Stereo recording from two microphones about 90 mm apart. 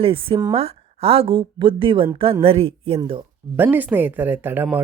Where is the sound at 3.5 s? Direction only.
20° right (ahead or behind).